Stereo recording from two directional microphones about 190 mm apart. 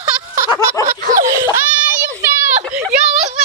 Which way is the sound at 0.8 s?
45° right (ahead or behind).